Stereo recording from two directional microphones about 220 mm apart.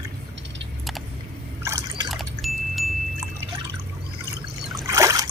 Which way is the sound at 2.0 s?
Centre (ahead or behind).